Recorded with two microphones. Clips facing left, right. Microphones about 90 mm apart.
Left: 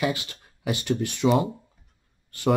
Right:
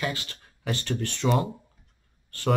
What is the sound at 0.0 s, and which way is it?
Speech, 15° left (ahead or behind).